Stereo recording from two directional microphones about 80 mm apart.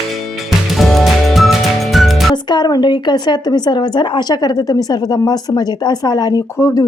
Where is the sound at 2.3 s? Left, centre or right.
Left.